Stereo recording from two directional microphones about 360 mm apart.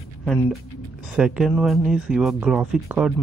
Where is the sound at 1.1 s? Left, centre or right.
Centre.